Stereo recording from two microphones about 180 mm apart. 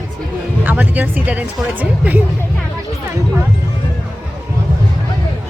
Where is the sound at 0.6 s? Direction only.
10° right (ahead or behind).